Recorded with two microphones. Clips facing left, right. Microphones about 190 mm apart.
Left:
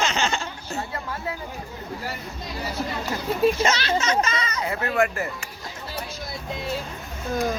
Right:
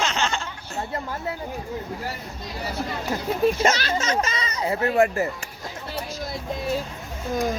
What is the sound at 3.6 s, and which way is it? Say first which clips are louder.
A child's voice: right 1 dB; 45° right (ahead or behind).